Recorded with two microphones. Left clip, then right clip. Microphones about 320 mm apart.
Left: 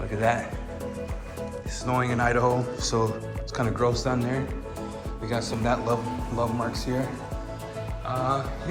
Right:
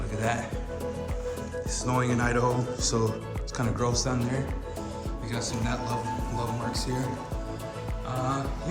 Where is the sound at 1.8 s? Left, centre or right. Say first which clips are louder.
Left 3 dB; centre.